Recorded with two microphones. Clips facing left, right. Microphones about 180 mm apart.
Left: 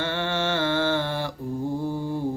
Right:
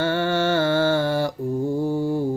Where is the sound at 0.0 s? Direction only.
45° right (ahead or behind).